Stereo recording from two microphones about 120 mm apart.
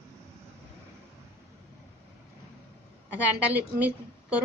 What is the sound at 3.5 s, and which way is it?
Speech, 10° right (ahead or behind).